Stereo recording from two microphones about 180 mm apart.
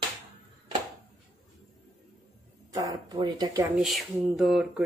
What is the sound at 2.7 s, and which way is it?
Speech, 20° right (ahead or behind).